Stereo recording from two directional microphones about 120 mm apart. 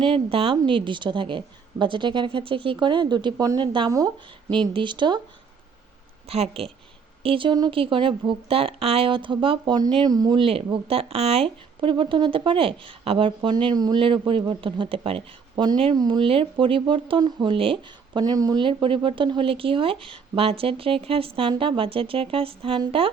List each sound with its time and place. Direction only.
0.0 s speech: 50° right (ahead or behind); by 3.7 s 30° right (ahead or behind)
3.7 s speech: 40° right (ahead or behind)
6.2 s speech: 55° right (ahead or behind); by 10.4 s 35° right (ahead or behind)
10.4 s speech: 50° right (ahead or behind)
15.6 s speech: 40° right (ahead or behind)
18.2 s speech: 30° right (ahead or behind); by 22.8 s 50° right (ahead or behind)